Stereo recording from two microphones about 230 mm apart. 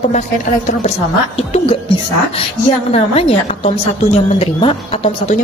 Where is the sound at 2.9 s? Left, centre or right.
Left.